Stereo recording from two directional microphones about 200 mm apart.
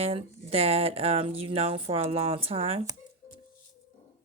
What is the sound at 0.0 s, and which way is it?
Speech, 30° right (ahead or behind).